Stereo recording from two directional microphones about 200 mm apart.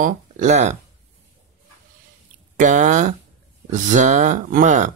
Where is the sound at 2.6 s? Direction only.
40° right (ahead or behind).